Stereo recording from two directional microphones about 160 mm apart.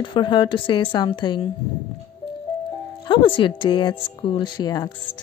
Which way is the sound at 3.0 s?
30° left (ahead or behind).